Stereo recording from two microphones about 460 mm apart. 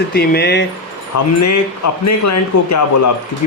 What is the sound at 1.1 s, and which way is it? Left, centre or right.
A man's voice, left.